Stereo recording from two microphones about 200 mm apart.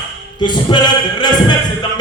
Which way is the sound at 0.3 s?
20° left (ahead or behind).